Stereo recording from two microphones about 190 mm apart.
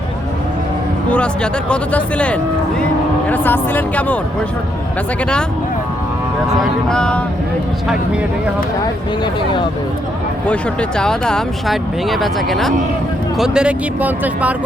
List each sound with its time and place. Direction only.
1.1 s speech: 5° left (ahead or behind)
6.9 s speech: 5° left (ahead or behind)
9.2 s speech: 25° left (ahead or behind)
10.5 s speech: 5° left (ahead or behind)